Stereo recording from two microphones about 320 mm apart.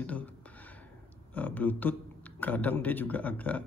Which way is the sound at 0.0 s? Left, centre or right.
Centre.